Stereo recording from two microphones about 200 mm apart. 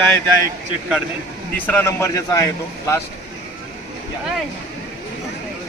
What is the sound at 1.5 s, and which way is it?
A man's voice, 10° left (ahead or behind).